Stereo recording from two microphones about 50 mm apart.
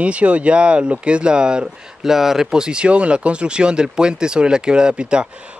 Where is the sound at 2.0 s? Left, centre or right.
Centre.